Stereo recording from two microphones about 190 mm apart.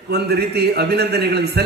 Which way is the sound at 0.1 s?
55° right (ahead or behind).